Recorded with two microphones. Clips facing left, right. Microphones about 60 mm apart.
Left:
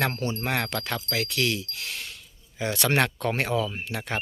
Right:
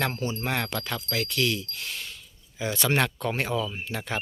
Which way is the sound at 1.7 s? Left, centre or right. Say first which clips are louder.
Even; left.